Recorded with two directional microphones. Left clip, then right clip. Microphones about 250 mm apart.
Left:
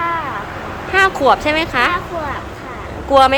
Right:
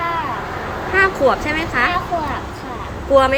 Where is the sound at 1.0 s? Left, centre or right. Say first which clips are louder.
Left 3 dB; centre.